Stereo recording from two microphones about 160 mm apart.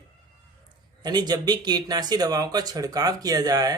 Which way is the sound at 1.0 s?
25° right (ahead or behind).